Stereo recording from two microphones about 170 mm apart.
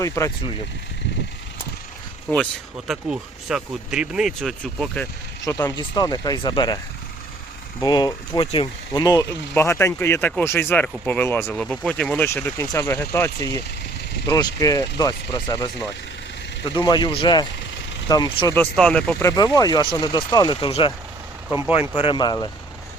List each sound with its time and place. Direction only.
0.2 s speech: 15° left (ahead or behind)
2.3 s speech: 5° left (ahead or behind)
5.5 s speech: 20° left (ahead or behind)
7.8 s speech: 25° left (ahead or behind)
11.5 s speech: centre (ahead or behind); by 18.5 s 25° left (ahead or behind)
18.5 s speech: 5° left (ahead or behind)
19.2 s speech: 20° left (ahead or behind)